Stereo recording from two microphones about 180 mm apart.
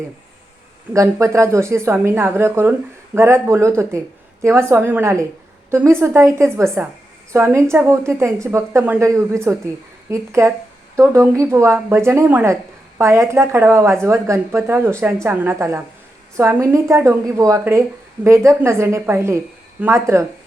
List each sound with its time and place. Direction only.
0.9 s speech: 15° right (ahead or behind)